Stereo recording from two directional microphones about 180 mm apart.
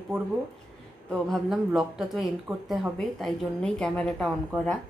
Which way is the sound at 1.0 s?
Centre (ahead or behind).